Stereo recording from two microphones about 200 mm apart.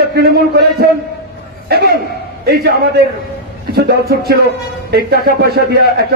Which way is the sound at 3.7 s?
50° right (ahead or behind).